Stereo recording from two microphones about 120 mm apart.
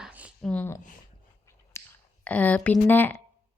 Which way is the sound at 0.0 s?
10° right (ahead or behind).